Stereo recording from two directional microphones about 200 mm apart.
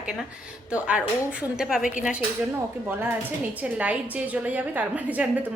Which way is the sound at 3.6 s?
5° right (ahead or behind).